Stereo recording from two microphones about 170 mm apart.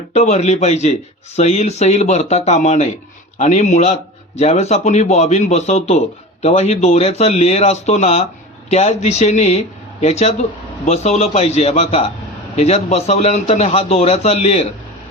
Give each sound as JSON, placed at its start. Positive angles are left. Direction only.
{"t": 0.1, "sound": "speech", "side_deg": 40}